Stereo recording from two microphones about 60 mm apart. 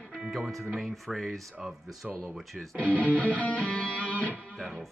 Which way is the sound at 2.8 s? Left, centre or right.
Right.